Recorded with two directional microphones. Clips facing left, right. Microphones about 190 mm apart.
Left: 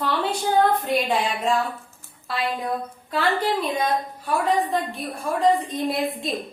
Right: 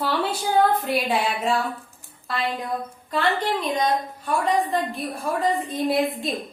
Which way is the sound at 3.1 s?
5° left (ahead or behind).